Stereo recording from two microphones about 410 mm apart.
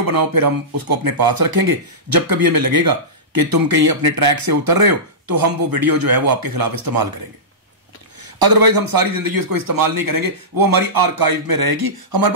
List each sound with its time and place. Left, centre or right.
0.0 s speech: right
8.2 s speech: right